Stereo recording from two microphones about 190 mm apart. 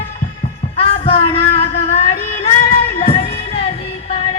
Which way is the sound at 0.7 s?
30° left (ahead or behind).